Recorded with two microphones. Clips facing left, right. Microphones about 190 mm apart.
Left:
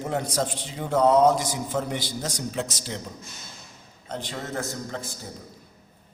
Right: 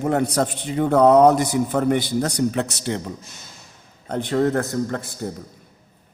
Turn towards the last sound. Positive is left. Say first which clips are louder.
# right 9 dB
turn(degrees=-60)  # may be behind; listen again after turning